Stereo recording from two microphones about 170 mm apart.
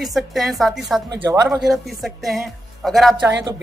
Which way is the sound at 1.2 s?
15° right (ahead or behind).